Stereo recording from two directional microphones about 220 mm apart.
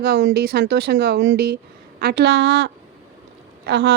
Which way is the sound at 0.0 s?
50° right (ahead or behind).